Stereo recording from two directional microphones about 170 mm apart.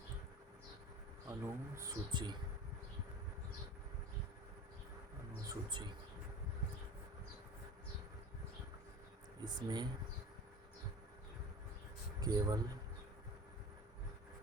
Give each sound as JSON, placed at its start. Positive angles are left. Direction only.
{"t": 1.3, "sound": "speech", "side_deg": -20}
{"t": 5.5, "sound": "speech", "side_deg": -25}
{"t": 9.4, "sound": "speech", "side_deg": -25}
{"t": 12.2, "sound": "speech", "side_deg": -20}